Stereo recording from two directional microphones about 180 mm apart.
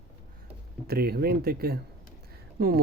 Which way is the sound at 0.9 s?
60° right (ahead or behind).